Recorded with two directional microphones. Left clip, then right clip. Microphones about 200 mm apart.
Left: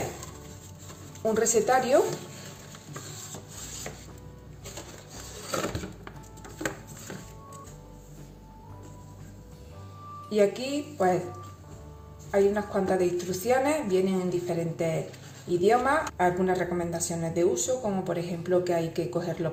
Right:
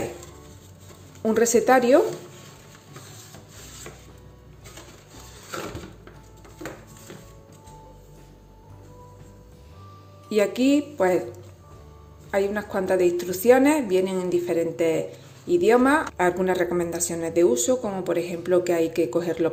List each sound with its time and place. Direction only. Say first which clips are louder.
1.2 s a woman's voice: right 5 dB; 40° right (ahead or behind)
10.2 s a woman's voice: right 4 dB; 45° right (ahead or behind)
12.3 s a woman's voice: even; 50° right (ahead or behind)